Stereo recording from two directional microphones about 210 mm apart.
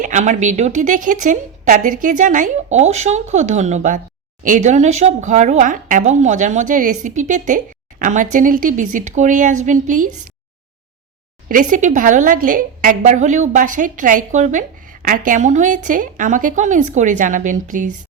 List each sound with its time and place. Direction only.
0.0 s speech: 35° right (ahead or behind)
11.4 s speech: 40° right (ahead or behind)